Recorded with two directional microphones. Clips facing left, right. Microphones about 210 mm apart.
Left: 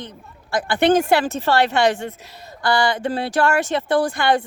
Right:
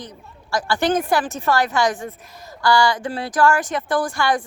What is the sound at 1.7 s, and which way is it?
Speech, 65° left (ahead or behind).